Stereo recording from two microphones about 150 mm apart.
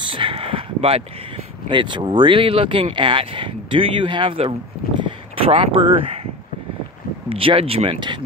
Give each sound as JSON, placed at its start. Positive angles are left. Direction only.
{"t": 0.0, "sound": "speech", "side_deg": -35}
{"t": 7.2, "sound": "speech", "side_deg": -40}